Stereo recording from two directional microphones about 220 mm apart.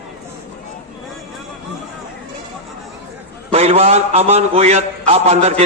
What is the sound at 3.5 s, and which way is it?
A man's voice, 30° right (ahead or behind).